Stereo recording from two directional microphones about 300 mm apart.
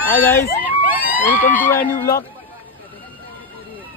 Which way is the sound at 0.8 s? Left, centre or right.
Centre.